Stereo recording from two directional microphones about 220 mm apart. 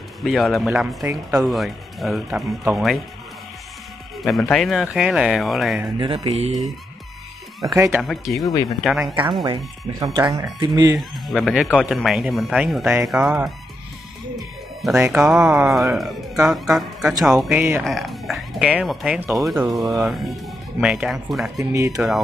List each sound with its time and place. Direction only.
0.2 s speech: centre (ahead or behind)
4.2 s speech: centre (ahead or behind)
5.9 s mantra: 25° right (ahead or behind)
7.7 s speech: 15° right (ahead or behind)
8.0 s speech: centre (ahead or behind)
9.3 s speech: 20° right (ahead or behind)
11.0 s speech: centre (ahead or behind)
14.8 s speech: 5° right (ahead or behind)
21.5 s speech: 15° right (ahead or behind)